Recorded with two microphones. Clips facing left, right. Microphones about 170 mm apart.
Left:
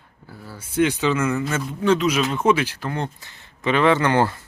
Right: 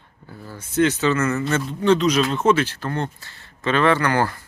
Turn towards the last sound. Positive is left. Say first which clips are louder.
# left 1 dB
turn(degrees=20)  # may be behind; listen again after turning